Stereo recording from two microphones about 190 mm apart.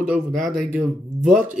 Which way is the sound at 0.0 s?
5° right (ahead or behind).